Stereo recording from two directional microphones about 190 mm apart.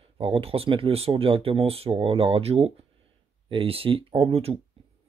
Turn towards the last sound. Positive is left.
turn(degrees=-30)  # may be behind; listen again after turning